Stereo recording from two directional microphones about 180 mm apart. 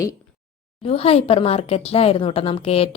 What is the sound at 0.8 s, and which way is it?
Speech, 35° left (ahead or behind).